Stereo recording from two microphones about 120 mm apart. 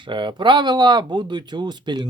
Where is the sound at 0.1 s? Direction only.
40° right (ahead or behind).